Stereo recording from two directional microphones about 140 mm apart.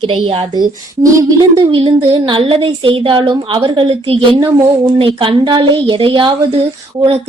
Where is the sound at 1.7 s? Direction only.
40° right (ahead or behind).